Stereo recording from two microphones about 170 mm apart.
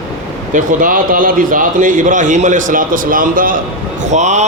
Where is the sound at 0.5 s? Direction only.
55° right (ahead or behind).